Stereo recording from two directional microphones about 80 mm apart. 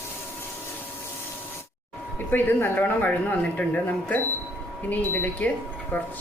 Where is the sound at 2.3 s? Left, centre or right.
Left.